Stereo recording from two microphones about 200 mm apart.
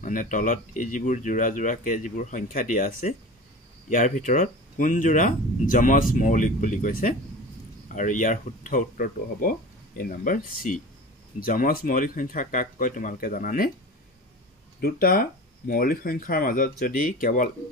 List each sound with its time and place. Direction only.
0.0 s speech: 40° left (ahead or behind)
14.8 s speech: 50° left (ahead or behind)